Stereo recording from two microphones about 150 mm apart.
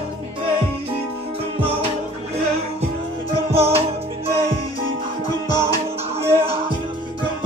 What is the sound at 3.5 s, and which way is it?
Music, 40° right (ahead or behind).